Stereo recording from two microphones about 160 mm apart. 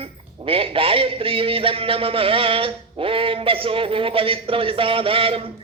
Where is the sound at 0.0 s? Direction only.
35° right (ahead or behind).